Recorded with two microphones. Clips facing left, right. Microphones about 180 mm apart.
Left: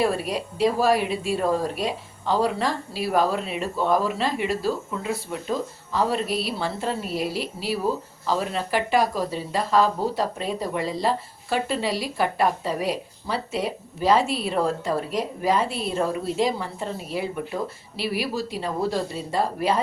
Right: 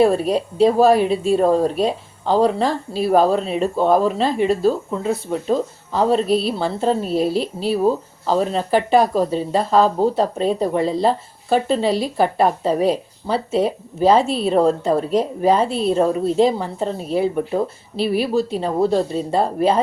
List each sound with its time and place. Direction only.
0.0 s speech: 25° right (ahead or behind)